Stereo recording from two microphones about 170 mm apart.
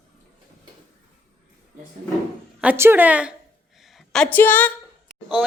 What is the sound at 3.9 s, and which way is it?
Speech, 5° left (ahead or behind).